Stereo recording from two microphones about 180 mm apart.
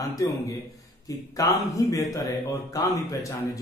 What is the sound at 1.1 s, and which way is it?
A man's voice, 20° left (ahead or behind).